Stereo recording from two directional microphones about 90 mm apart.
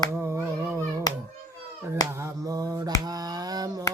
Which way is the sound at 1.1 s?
45° left (ahead or behind).